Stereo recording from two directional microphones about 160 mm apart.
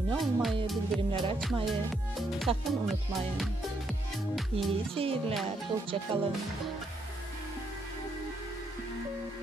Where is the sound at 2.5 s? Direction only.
35° right (ahead or behind).